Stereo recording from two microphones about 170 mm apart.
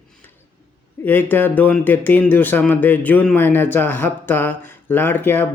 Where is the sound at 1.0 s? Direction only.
10° left (ahead or behind).